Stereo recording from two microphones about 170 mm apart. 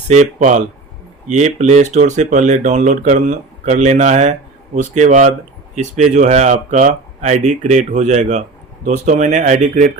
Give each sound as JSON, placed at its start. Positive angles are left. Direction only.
{"t": 0.1, "sound": "speech", "side_deg": -45}